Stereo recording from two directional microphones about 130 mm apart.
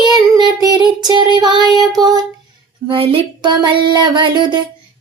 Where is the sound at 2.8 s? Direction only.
45° right (ahead or behind).